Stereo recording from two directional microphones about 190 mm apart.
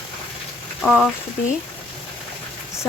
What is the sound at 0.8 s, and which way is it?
Speech, 5° left (ahead or behind).